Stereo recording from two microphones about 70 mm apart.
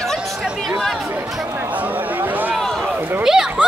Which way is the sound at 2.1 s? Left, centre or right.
Right.